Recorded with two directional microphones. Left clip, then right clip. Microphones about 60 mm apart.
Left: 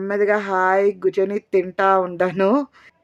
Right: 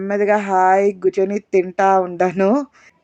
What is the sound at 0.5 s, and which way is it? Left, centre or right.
Speech, centre.